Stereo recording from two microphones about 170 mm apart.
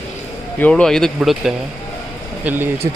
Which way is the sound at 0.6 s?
5° left (ahead or behind).